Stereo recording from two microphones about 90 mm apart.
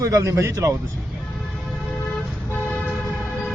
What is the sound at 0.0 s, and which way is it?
Speech, 40° right (ahead or behind).